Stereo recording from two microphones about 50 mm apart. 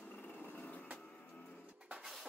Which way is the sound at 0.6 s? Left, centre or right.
Left.